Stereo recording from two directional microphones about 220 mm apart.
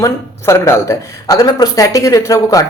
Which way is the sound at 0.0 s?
15° left (ahead or behind).